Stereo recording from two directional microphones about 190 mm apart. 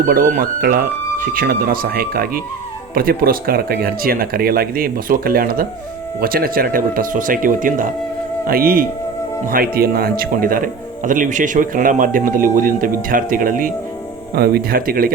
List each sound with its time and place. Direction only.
0.0 s speech: 45° right (ahead or behind)